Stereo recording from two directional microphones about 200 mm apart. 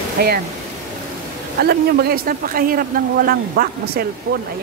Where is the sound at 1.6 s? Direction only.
50° right (ahead or behind).